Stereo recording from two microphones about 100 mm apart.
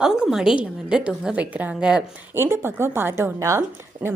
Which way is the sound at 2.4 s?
25° right (ahead or behind).